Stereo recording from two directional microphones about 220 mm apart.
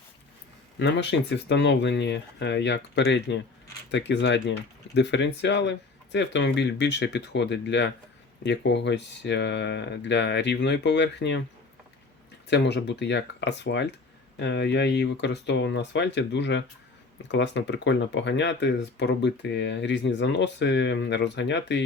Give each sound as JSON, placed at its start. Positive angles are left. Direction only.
{"t": 0.8, "sound": "speech", "side_deg": 50}
{"t": 12.5, "sound": "speech", "side_deg": 50}